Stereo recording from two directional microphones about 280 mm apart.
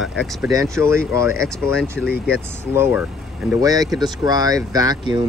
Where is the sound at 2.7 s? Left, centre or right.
Centre.